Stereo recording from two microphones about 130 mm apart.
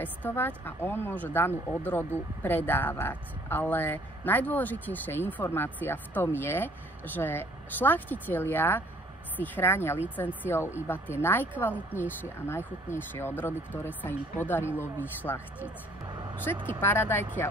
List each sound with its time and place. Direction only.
0.0 s speech: 15° left (ahead or behind)
16.5 s speech: 20° left (ahead or behind)